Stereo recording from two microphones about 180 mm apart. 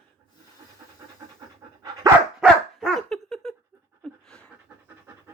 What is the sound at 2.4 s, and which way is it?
Dog, centre (ahead or behind).